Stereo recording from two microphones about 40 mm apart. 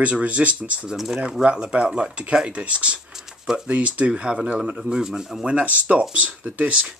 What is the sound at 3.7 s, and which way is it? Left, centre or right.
Speech, right.